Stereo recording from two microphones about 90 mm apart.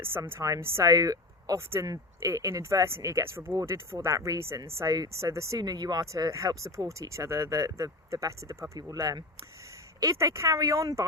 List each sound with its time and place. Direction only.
0.2 s speech: 35° right (ahead or behind)